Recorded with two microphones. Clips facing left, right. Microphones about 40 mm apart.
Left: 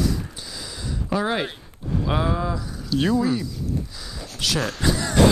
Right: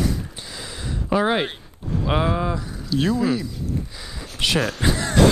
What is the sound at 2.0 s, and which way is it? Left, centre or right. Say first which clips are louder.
Speech: right 3 dB; right.